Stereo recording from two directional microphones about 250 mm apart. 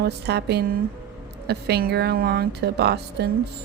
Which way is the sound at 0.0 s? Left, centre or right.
Right.